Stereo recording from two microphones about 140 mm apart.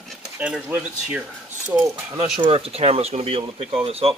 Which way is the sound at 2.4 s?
45° right (ahead or behind).